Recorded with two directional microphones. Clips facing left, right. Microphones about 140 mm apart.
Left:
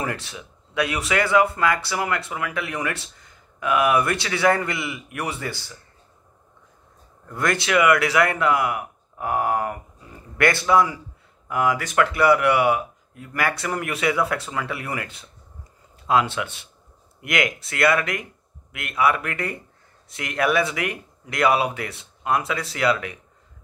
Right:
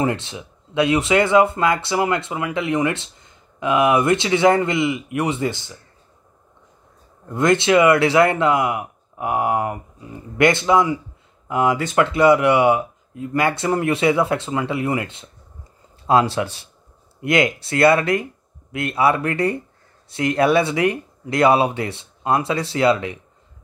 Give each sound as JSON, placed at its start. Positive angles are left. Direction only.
{"t": 0.0, "sound": "speech", "side_deg": -25}
{"t": 7.2, "sound": "speech", "side_deg": -20}
{"t": 16.1, "sound": "speech", "side_deg": -35}